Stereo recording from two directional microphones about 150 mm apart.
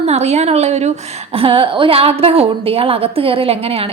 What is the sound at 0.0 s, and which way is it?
A woman's voice, 45° right (ahead or behind).